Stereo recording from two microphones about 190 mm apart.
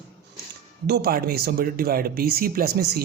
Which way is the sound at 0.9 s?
55° right (ahead or behind).